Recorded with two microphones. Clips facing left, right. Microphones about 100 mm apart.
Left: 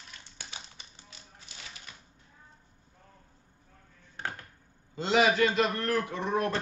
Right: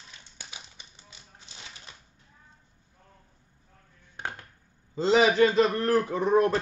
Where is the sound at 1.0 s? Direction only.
25° right (ahead or behind).